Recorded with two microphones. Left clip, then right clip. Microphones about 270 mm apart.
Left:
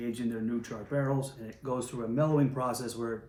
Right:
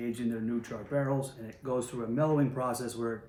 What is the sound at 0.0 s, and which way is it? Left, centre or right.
Speech, centre.